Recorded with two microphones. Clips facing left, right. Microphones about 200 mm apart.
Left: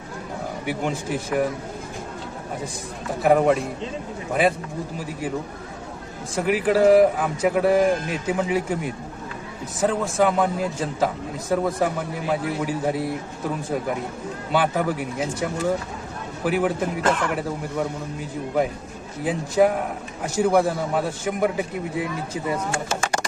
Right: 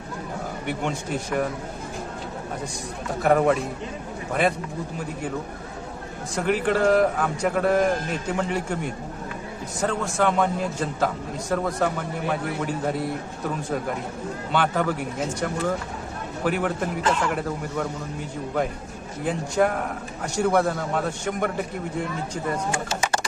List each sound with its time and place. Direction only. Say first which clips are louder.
0.6 s a man's voice: left 2 dB; 5° left (ahead or behind)
3.2 s a man's voice: left 2 dB; centre (ahead or behind)
6.3 s a man's voice: left 2 dB; 5° left (ahead or behind)
14.5 s a man's voice: left 2 dB; 5° left (ahead or behind)
16.5 s a man's voice: left 3 dB; 5° left (ahead or behind)
17.0 s speech: left 1 dB; 55° left (ahead or behind)
19.2 s a man's voice: left 3 dB; 5° left (ahead or behind)